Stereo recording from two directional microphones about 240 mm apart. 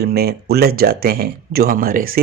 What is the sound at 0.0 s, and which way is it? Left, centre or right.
Speech, right.